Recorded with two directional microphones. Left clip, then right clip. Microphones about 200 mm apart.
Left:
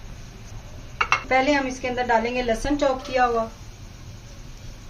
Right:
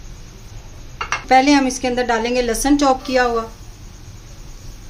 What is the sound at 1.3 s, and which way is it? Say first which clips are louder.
A woman's voice: right 12 dB; 65° right (ahead or behind).